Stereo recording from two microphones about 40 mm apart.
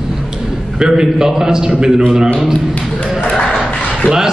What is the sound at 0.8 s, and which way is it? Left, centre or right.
A man's voice, centre.